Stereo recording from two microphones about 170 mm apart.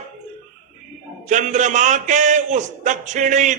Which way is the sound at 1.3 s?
45° right (ahead or behind).